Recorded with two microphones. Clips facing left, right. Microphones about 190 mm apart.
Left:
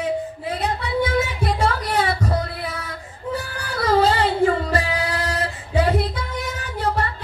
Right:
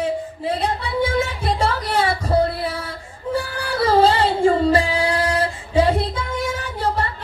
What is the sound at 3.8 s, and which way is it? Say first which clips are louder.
Female singing: right 2 dB; 30° right (ahead or behind).